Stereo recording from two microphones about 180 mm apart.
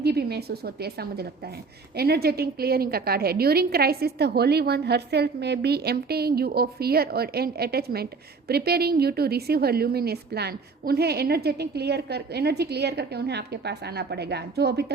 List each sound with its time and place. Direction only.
0.0 s a woman's voice: 65° right (ahead or behind)